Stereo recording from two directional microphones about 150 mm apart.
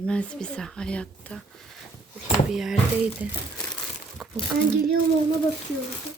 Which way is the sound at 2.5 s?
Centre (ahead or behind).